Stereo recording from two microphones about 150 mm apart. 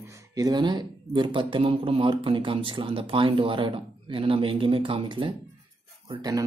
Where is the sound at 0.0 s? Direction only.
20° right (ahead or behind).